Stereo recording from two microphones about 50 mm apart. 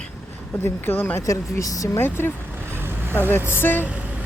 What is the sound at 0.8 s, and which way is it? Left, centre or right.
Speech, left.